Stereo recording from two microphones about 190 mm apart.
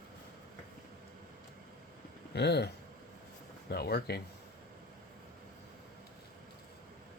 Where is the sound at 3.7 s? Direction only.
55° left (ahead or behind).